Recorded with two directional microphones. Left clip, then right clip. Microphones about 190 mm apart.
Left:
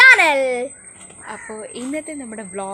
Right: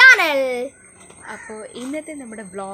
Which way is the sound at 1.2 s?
15° left (ahead or behind).